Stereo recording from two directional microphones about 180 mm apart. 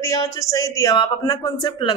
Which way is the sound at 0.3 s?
15° left (ahead or behind).